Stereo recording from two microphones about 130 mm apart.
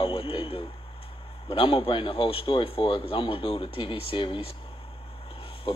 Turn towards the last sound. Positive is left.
turn(degrees=40)  # may be behind; listen again after turning